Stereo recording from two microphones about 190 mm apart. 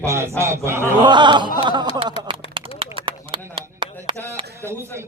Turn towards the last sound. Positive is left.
turn(degrees=-25)  # may be behind; listen again after turning